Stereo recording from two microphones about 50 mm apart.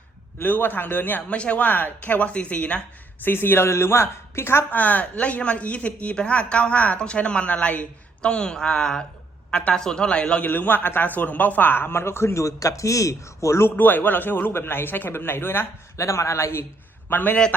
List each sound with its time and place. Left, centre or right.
0.4 s a man's voice: left
1.3 s speech: left
3.2 s a man's voice: left
3.7 s speech: left
4.7 s speech: left
10.4 s a man's voice: left
13.7 s a man's voice: left
16.0 s a man's voice: left
17.1 s a man's voice: left